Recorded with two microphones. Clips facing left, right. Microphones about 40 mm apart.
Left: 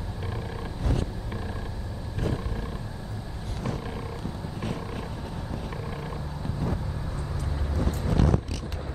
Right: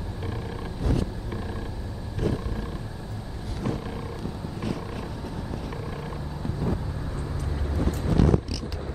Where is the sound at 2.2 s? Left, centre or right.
Left.